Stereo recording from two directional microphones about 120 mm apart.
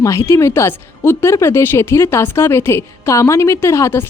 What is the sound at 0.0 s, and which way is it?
Speech, 25° left (ahead or behind).